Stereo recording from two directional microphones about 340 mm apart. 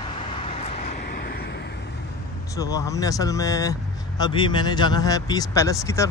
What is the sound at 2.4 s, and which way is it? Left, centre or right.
Speech, centre.